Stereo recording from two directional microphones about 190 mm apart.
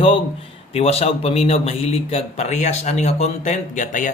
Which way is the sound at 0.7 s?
30° left (ahead or behind).